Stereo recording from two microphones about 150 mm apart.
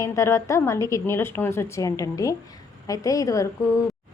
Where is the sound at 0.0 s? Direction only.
20° left (ahead or behind).